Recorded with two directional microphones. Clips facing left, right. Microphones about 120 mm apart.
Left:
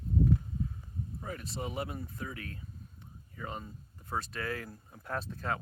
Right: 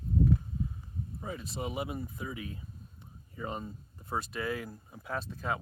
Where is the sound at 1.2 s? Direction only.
10° right (ahead or behind).